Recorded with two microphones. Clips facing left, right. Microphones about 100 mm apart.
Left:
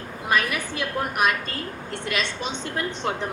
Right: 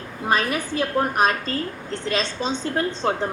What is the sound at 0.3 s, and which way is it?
A woman's voice, 30° right (ahead or behind).